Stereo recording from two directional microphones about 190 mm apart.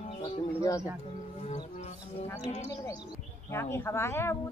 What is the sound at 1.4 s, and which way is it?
Music, 35° left (ahead or behind).